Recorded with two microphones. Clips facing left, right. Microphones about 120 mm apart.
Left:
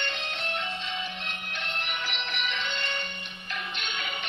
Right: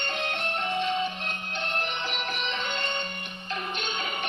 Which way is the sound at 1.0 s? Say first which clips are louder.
Right 6 dB; 35° right (ahead or behind).